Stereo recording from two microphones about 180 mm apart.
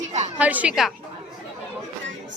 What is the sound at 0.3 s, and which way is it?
Speech, 5° right (ahead or behind).